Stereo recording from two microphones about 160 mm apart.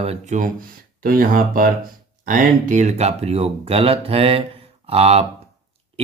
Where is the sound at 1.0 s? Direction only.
60° right (ahead or behind).